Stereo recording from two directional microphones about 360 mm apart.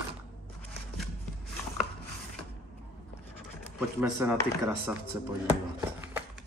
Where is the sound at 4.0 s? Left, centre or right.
Centre.